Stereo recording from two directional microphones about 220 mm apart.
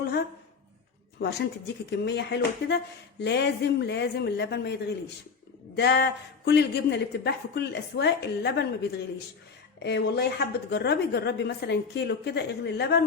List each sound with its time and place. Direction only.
1.2 s speech: 50° left (ahead or behind)
9.8 s speech: 50° left (ahead or behind)